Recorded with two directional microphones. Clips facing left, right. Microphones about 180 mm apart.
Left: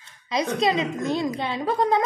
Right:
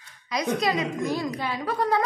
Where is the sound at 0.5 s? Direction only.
25° left (ahead or behind).